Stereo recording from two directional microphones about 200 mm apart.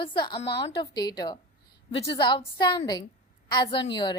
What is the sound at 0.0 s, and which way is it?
A woman's voice, 25° left (ahead or behind).